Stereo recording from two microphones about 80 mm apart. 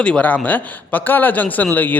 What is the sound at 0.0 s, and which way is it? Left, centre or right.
A man's voice, centre.